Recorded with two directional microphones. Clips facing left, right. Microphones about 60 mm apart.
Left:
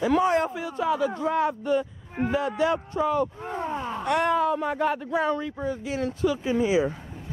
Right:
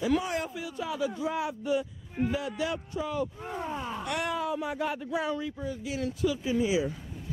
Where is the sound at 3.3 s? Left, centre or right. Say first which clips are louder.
Left 5 dB; centre.